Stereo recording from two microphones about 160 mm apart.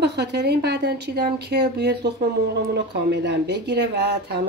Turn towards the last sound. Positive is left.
turn(degrees=-90)